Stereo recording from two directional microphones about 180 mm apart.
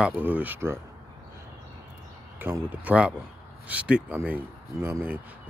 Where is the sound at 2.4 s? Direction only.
10° right (ahead or behind).